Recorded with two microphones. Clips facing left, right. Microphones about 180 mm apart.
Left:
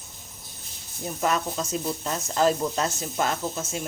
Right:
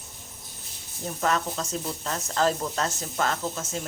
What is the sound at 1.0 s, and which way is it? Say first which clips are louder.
Speech: left 1 dB; 10° left (ahead or behind).